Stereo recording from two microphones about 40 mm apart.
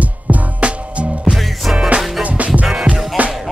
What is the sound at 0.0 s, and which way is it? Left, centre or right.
Music, right.